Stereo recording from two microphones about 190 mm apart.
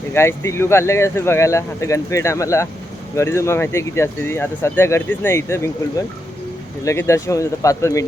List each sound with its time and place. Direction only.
0.1 s speech: 15° left (ahead or behind)
6.8 s speech: 15° left (ahead or behind)